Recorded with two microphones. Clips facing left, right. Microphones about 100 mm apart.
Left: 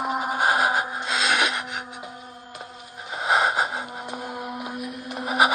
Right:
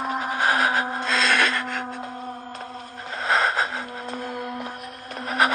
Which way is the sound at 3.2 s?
10° left (ahead or behind).